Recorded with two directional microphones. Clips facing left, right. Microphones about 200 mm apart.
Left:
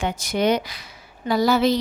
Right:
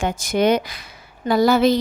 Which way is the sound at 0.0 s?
50° right (ahead or behind).